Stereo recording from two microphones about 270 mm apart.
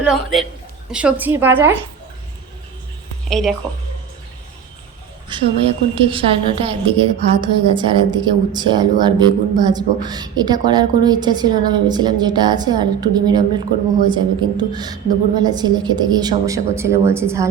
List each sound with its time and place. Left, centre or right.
0.0 s a man's voice: centre
3.2 s a woman's voice: centre
5.3 s a woman's voice: centre